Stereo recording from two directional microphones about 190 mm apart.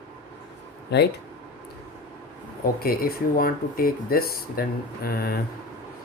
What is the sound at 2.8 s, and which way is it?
Speech, 50° left (ahead or behind).